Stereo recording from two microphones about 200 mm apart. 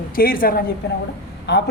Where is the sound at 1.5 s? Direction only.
60° left (ahead or behind).